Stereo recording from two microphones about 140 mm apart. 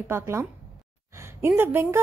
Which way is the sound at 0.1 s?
20° right (ahead or behind).